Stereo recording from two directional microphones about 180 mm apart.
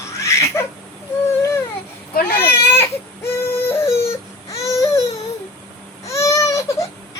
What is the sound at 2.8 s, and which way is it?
Baby cry, 10° left (ahead or behind).